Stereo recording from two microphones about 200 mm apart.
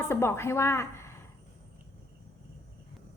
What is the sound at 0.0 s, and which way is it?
A woman's voice, 10° left (ahead or behind).